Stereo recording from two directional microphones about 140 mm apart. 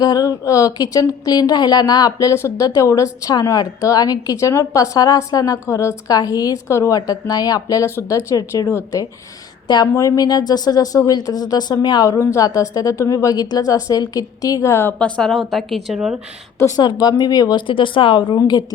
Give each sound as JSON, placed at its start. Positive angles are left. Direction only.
{"t": 0.0, "sound": "speech", "side_deg": 25}
{"t": 14.9, "sound": "a woman's voice", "side_deg": 5}
{"t": 16.6, "sound": "speech", "side_deg": 25}